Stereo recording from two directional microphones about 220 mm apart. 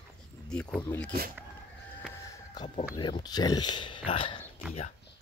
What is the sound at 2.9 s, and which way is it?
Speech, 20° left (ahead or behind).